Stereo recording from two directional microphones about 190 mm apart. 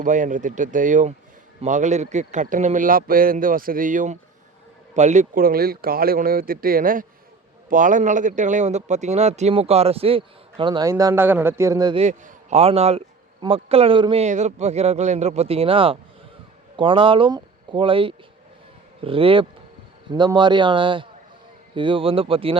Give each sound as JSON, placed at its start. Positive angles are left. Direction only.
{"t": 0.0, "sound": "speech", "side_deg": -40}
{"t": 11.9, "sound": "speech", "side_deg": -35}